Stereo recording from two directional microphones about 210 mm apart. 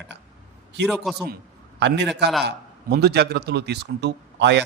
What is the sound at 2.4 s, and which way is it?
A man's voice, 50° right (ahead or behind).